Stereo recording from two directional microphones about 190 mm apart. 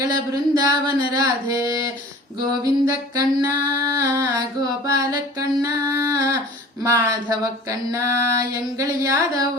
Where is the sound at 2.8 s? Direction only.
15° right (ahead or behind).